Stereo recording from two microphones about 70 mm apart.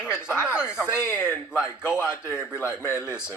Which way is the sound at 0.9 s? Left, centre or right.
Left.